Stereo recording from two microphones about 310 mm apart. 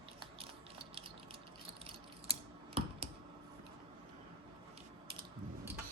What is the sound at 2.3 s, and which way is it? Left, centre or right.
Typing, centre.